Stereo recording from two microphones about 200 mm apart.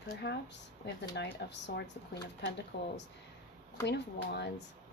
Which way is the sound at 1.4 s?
60° left (ahead or behind).